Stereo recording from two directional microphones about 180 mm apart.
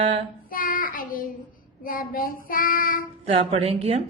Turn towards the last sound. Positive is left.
turn(degrees=-35)  # may be behind; listen again after turning